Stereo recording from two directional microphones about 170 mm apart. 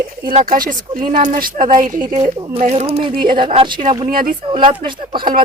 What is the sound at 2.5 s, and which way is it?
A woman's voice, 40° right (ahead or behind).